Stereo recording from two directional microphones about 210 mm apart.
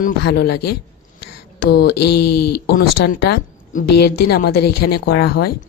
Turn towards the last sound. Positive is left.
turn(degrees=50)  # may be behind; listen again after turning